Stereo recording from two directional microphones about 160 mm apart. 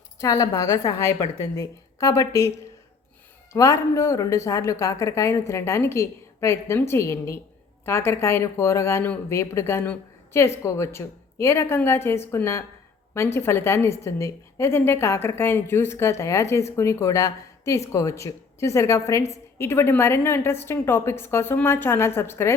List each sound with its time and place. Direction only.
0.2 s a woman's voice: 20° left (ahead or behind)
3.5 s a woman's voice: 20° left (ahead or behind)